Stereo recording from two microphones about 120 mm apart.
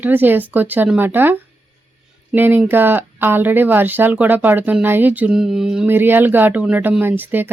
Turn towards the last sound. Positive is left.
turn(degrees=-15)  # may be behind; listen again after turning